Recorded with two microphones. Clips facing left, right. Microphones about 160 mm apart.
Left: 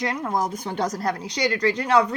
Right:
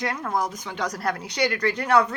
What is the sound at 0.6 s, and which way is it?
Speech, 45° left (ahead or behind).